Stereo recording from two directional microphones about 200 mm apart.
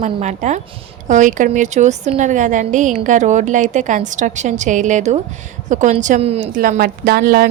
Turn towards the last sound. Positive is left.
turn(degrees=-50)  # may be behind; listen again after turning